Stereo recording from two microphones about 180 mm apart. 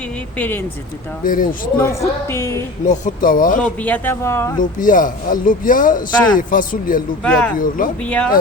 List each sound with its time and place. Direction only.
0.3 s speech: 10° left (ahead or behind)
1.2 s speech: 50° left (ahead or behind)
1.8 s speech: 15° left (ahead or behind)
2.8 s speech: 45° left (ahead or behind)
3.6 s speech: 10° left (ahead or behind)
4.8 s speech: 50° left (ahead or behind)
7.3 s speech: 5° left (ahead or behind)